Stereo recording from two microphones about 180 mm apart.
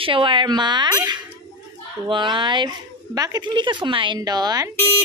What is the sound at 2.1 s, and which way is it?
A woman's voice, 25° right (ahead or behind).